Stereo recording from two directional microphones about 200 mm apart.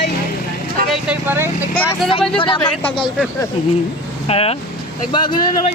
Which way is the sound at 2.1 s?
25° left (ahead or behind).